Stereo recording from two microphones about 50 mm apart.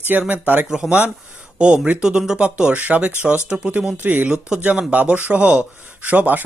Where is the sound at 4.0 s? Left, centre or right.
Right.